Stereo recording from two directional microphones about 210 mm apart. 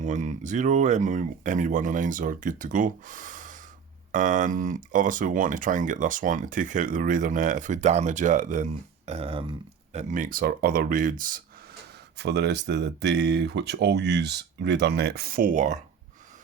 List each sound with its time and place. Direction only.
0.0 s speech: 35° right (ahead or behind)
12.1 s speech: 55° right (ahead or behind); by 15.8 s 35° right (ahead or behind)